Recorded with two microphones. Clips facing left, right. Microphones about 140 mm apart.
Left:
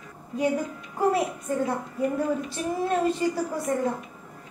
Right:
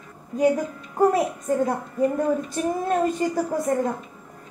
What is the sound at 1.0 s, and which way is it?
A woman's voice, 45° right (ahead or behind).